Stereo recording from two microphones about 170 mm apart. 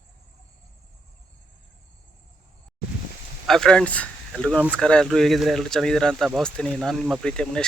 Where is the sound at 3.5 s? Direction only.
5° left (ahead or behind).